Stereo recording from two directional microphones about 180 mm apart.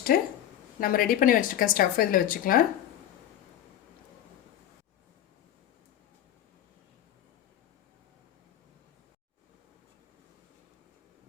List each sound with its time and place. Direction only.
0.1 s speech: 55° left (ahead or behind)